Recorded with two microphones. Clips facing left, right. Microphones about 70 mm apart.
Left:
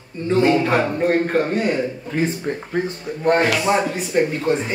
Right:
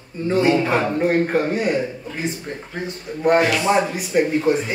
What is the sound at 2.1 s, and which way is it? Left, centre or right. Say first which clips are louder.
Speech: left 8 dB; left.